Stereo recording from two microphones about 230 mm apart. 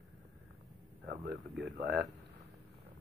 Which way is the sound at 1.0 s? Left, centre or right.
Right.